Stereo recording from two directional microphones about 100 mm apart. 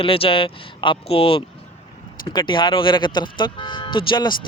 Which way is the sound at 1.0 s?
75° left (ahead or behind).